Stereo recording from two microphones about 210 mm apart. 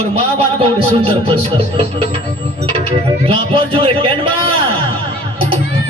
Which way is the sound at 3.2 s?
25° right (ahead or behind).